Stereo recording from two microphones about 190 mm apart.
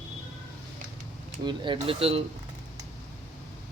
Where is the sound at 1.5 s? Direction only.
25° right (ahead or behind).